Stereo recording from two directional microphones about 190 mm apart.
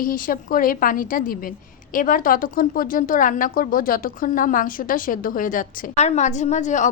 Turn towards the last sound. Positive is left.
turn(degrees=40)  # may be behind; listen again after turning